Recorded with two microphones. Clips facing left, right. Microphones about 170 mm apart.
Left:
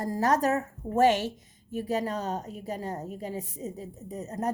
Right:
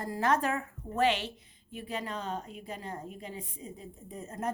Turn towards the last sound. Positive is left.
turn(degrees=40)  # may be behind; listen again after turning